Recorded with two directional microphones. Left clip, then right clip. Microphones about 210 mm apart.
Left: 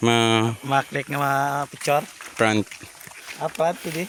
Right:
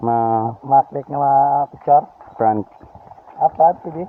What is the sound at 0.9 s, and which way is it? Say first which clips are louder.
Speech: right 8 dB; 35° left (ahead or behind).